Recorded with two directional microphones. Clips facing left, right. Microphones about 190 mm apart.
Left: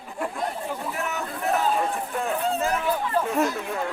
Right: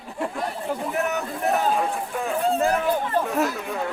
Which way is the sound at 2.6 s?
40° right (ahead or behind).